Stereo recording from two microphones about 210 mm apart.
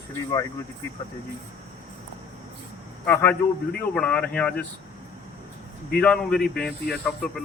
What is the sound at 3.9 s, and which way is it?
Speech, 5° left (ahead or behind).